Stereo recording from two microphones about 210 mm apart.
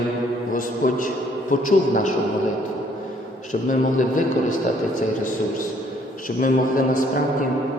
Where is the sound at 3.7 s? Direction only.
40° left (ahead or behind).